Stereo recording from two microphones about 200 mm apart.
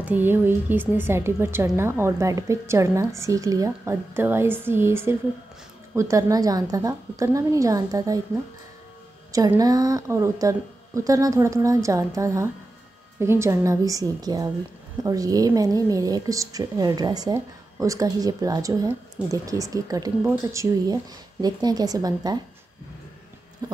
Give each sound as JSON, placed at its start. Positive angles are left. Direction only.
{"t": 0.0, "sound": "a woman's voice", "side_deg": -10}
{"t": 9.3, "sound": "a woman's voice", "side_deg": -15}